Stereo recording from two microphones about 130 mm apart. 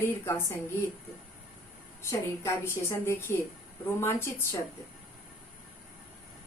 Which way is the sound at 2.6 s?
20° left (ahead or behind).